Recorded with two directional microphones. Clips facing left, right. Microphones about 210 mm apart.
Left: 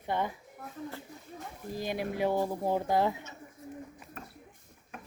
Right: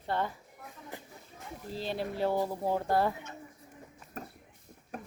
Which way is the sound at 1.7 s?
15° left (ahead or behind).